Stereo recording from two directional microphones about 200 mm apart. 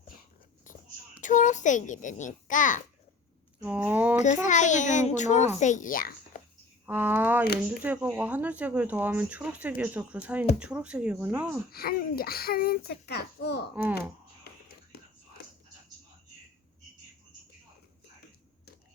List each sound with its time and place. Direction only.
1.2 s a child's voice: 40° left (ahead or behind)
3.6 s speech: 10° right (ahead or behind)
4.2 s a child's voice: 40° left (ahead or behind)
6.8 s speech: 10° right (ahead or behind)
11.7 s a child's voice: 50° left (ahead or behind)
14.5 s whispering: 55° left (ahead or behind)
15.4 s music: 55° left (ahead or behind)